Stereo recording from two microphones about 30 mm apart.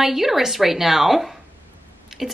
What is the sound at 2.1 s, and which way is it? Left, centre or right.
Tick-tock, centre.